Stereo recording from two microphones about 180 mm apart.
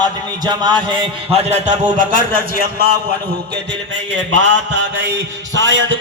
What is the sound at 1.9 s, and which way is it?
Speech, 45° right (ahead or behind).